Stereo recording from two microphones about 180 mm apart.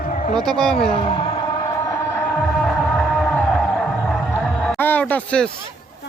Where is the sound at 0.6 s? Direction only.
5° left (ahead or behind).